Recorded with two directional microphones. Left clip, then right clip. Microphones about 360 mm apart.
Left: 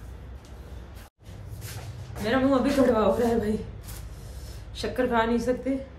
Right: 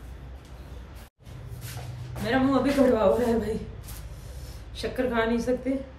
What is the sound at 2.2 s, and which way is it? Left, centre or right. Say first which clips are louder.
Speech: left 1 dB; centre.